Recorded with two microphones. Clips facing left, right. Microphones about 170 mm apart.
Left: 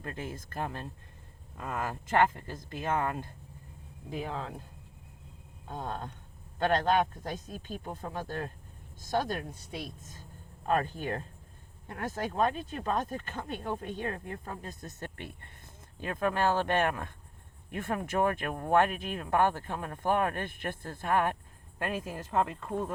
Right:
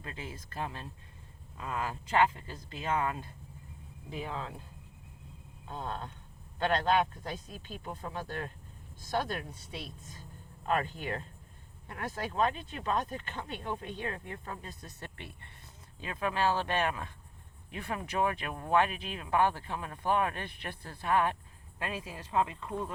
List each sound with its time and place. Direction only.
0.0 s speech: 55° left (ahead or behind)
5.6 s speech: 45° left (ahead or behind)